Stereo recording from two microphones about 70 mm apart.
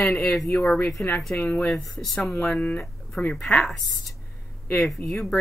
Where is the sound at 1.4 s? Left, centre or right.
Left.